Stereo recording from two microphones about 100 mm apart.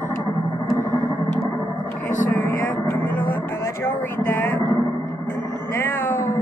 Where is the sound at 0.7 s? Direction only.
20° left (ahead or behind).